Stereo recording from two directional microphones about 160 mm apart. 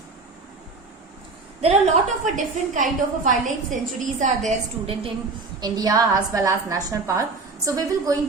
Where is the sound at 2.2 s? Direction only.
50° right (ahead or behind).